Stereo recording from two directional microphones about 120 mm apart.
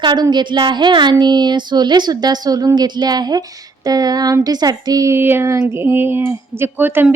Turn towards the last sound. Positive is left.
turn(degrees=-15)  # may be behind; listen again after turning